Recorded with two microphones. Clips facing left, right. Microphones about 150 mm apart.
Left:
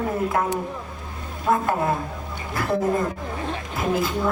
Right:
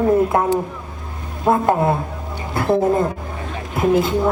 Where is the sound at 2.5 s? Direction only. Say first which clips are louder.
Right 6 dB; 25° right (ahead or behind).